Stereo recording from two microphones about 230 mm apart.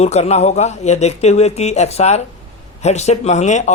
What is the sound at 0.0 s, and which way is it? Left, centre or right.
Speech, left.